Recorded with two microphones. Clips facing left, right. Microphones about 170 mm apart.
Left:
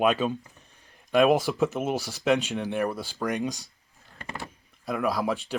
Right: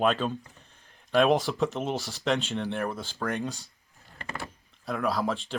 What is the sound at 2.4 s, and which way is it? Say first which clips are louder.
Speech: left 3 dB; 15° left (ahead or behind).